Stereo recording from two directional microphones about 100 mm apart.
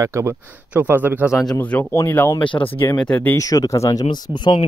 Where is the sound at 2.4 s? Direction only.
60° left (ahead or behind).